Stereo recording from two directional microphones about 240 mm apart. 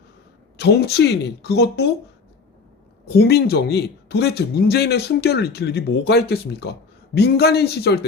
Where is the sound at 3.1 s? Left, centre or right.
Left.